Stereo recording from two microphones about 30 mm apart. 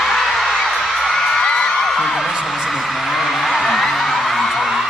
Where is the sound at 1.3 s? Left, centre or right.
Left.